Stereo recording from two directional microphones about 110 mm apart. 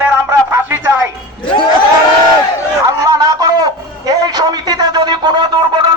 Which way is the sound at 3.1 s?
35° right (ahead or behind).